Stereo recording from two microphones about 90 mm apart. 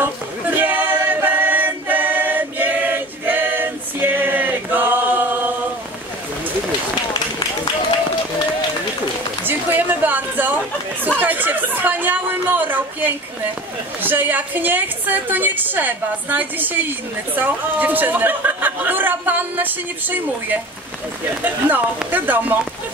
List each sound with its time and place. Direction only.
0.0 s male singing: 20° right (ahead or behind)
9.4 s a sound: 20° right (ahead or behind)
11.1 s speech: 20° right (ahead or behind)
21.6 s speech: 20° right (ahead or behind)